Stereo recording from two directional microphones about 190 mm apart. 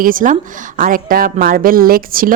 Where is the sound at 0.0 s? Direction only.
45° right (ahead or behind).